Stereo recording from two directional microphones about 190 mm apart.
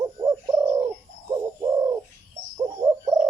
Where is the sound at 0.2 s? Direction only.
20° right (ahead or behind).